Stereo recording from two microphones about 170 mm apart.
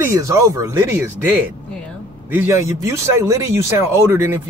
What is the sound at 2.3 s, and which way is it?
Speech, 15° right (ahead or behind).